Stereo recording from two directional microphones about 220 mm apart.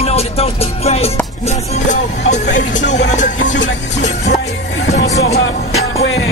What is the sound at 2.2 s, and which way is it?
Speech, 35° left (ahead or behind).